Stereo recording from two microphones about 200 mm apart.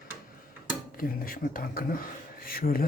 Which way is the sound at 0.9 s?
45° left (ahead or behind).